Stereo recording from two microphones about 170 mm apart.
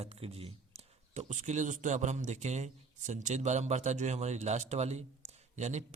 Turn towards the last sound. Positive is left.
turn(degrees=-45)  # may be behind; listen again after turning